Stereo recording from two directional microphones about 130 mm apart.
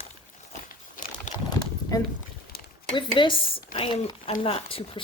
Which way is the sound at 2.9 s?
40° left (ahead or behind).